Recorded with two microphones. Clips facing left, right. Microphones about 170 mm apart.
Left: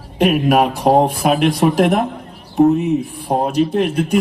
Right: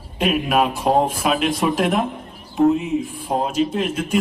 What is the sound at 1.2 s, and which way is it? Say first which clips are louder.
Speech: left 5 dB; 55° left (ahead or behind).